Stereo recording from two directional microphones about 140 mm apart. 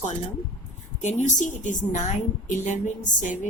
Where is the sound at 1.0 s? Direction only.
60° left (ahead or behind).